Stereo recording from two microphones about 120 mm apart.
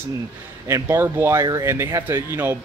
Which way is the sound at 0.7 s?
20° right (ahead or behind).